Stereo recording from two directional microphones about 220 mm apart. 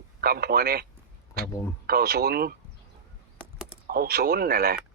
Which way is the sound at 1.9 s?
45° right (ahead or behind).